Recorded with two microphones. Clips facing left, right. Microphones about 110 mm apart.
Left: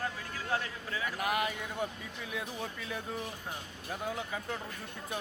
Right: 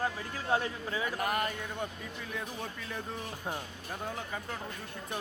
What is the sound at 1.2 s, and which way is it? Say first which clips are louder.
Speech: left 3 dB; 5° left (ahead or behind).